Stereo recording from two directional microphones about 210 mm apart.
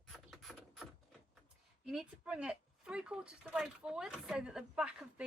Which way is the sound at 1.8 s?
5° right (ahead or behind).